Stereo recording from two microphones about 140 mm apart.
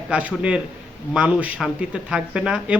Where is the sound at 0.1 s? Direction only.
10° right (ahead or behind).